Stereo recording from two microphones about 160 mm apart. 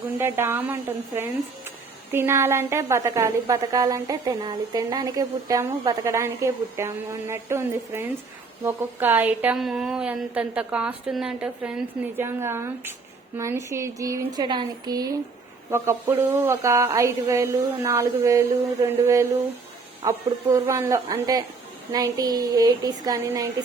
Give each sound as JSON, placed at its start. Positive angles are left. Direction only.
{"t": 0.2, "sound": "a woman's voice", "side_deg": -15}